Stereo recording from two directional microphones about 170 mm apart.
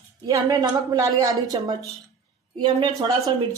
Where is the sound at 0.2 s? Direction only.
25° right (ahead or behind).